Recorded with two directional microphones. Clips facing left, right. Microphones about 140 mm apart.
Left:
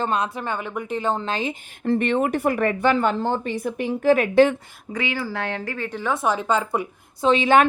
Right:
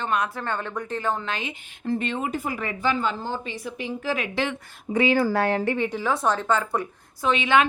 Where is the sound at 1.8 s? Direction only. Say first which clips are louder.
Left 6 dB; 60° left (ahead or behind).